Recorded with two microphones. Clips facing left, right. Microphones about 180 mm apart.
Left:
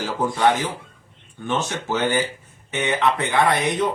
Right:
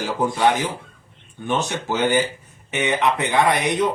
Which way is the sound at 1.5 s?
15° right (ahead or behind).